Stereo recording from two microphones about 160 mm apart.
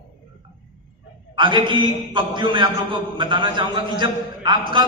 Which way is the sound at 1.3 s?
30° right (ahead or behind).